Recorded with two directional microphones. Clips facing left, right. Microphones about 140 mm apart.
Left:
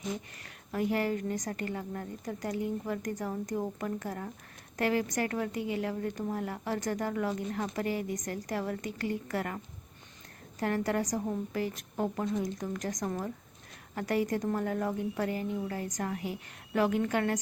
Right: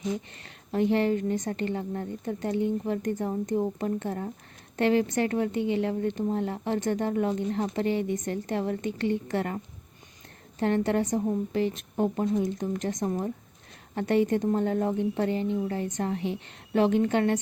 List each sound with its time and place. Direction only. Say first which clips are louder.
0.4 s a woman's voice: right 6 dB; 25° right (ahead or behind)
10.6 s a woman's voice: right 5 dB; 25° right (ahead or behind)